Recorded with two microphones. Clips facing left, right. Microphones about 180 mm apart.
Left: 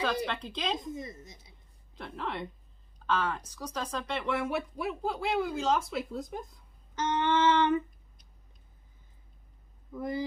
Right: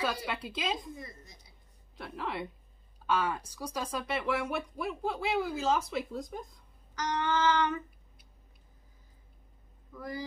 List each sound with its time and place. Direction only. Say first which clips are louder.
0.0 s a woman's voice: left 2 dB; 5° right (ahead or behind)
0.7 s female singing: left 5 dB; 20° left (ahead or behind)
2.0 s speech: even; 5° right (ahead or behind)
7.0 s female singing: left 3 dB; 25° left (ahead or behind)
9.9 s female singing: left 6 dB; 25° left (ahead or behind)